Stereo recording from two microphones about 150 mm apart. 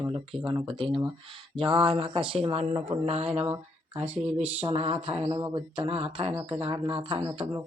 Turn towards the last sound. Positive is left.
turn(degrees=-35)  # may be behind; listen again after turning